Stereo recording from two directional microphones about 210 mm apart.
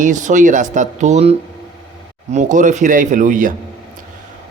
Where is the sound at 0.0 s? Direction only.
35° right (ahead or behind).